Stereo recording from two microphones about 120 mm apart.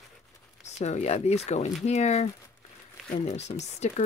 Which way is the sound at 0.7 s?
70° left (ahead or behind).